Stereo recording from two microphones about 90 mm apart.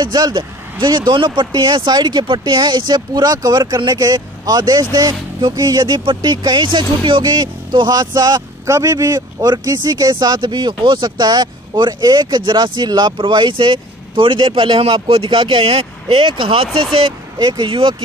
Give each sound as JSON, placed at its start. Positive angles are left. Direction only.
{"t": 0.0, "sound": "speech", "side_deg": -50}
{"t": 8.6, "sound": "speech", "side_deg": -35}
{"t": 17.4, "sound": "speech", "side_deg": -50}
{"t": 17.6, "sound": "speech", "side_deg": -75}